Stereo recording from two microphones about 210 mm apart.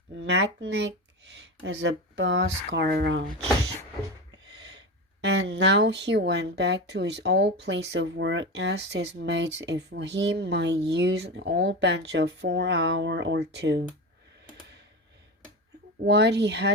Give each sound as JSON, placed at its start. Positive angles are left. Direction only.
{"t": 0.2, "sound": "speech", "side_deg": -55}
{"t": 5.2, "sound": "speech", "side_deg": -55}
{"t": 16.0, "sound": "speech", "side_deg": -55}